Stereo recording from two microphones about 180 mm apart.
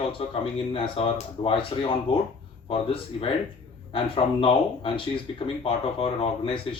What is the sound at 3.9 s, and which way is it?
Speech, 30° left (ahead or behind).